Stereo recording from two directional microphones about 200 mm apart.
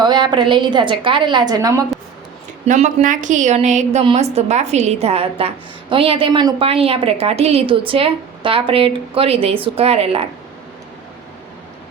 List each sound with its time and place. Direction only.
0.0 s a woman's voice: 20° right (ahead or behind)
2.6 s a woman's voice: 40° right (ahead or behind)